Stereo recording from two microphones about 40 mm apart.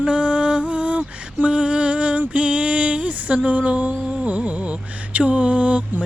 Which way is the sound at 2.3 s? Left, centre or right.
Right.